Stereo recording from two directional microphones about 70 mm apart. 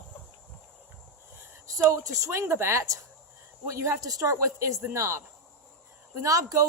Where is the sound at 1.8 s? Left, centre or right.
Right.